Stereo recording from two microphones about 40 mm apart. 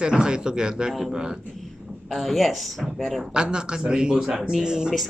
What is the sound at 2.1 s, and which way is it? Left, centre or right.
Speech, centre.